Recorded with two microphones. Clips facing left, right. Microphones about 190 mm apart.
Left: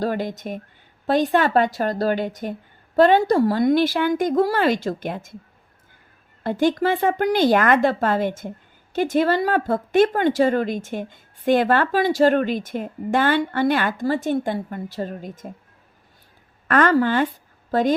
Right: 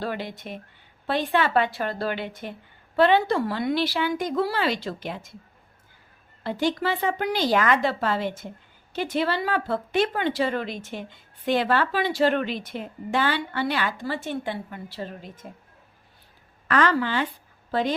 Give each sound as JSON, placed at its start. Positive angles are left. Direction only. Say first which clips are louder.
{"t": 0.0, "sound": "speech", "louder": "left 7 dB", "side_deg": 45}
{"t": 6.4, "sound": "speech", "louder": "left 6 dB", "side_deg": 50}
{"t": 16.6, "sound": "speech", "louder": "left 5 dB", "side_deg": 50}